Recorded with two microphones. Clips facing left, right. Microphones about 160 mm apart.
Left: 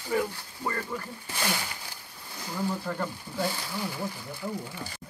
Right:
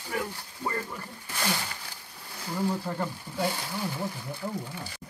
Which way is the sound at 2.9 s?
25° right (ahead or behind).